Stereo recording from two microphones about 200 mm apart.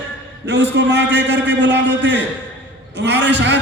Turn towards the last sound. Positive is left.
turn(degrees=-65)  # may be behind; listen again after turning